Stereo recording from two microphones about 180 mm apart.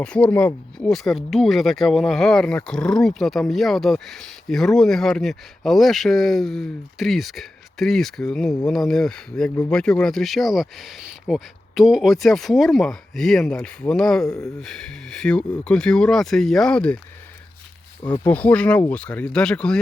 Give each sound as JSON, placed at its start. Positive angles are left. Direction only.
{"t": 0.0, "sound": "speech", "side_deg": 5}
{"t": 18.0, "sound": "speech", "side_deg": 25}
{"t": 18.3, "sound": "speech", "side_deg": 10}